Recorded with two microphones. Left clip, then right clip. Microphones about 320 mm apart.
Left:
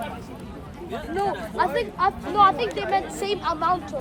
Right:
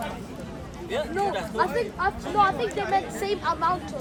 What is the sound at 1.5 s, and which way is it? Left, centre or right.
Speech, left.